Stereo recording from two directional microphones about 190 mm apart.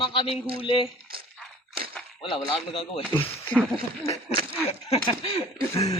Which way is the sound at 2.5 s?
30° left (ahead or behind).